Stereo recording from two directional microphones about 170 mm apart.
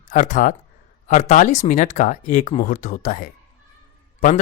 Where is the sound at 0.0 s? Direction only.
50° left (ahead or behind).